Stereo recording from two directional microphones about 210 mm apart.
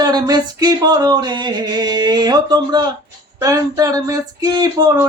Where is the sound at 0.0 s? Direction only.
20° right (ahead or behind).